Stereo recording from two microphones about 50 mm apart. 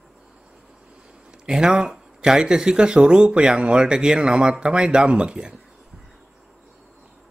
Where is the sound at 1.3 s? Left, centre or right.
Centre.